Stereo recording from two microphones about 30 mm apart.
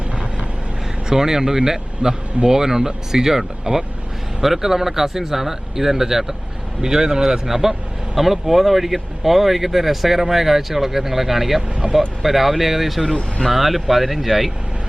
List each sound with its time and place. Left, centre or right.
1.1 s speech: centre